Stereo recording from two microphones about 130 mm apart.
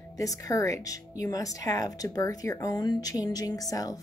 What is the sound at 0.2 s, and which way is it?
A woman's voice, 25° left (ahead or behind).